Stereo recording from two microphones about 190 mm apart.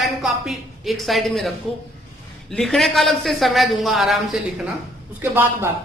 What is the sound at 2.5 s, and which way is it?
A man's voice, centre (ahead or behind).